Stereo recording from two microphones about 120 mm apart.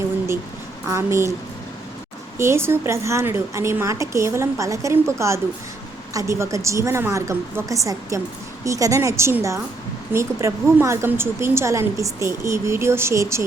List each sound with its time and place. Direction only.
0.9 s a woman's voice: 25° right (ahead or behind)
2.4 s a woman's voice: 20° right (ahead or behind)